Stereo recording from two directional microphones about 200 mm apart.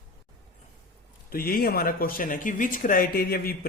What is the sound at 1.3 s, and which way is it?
Speech, 45° left (ahead or behind).